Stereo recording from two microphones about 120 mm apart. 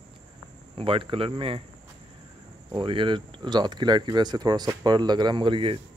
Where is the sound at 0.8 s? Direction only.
50° right (ahead or behind).